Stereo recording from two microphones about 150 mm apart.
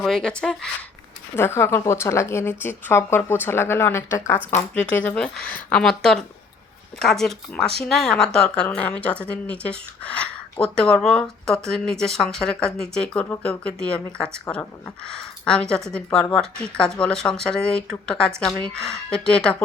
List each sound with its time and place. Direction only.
0.0 s speech: 5° left (ahead or behind)
1.4 s speech: 15° left (ahead or behind)
15.4 s speech: 5° left (ahead or behind)